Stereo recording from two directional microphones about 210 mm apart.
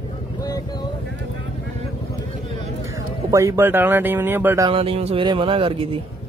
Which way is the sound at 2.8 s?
15° right (ahead or behind).